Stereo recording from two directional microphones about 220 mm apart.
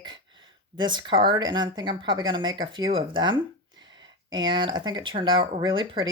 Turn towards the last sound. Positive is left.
turn(degrees=-20)  # may be behind; listen again after turning